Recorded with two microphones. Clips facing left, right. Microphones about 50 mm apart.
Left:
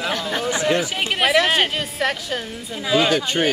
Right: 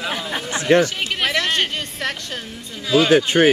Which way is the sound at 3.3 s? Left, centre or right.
Right.